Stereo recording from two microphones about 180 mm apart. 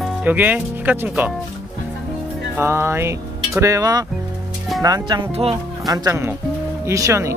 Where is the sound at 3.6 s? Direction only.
20° right (ahead or behind); by 5.5 s 35° right (ahead or behind).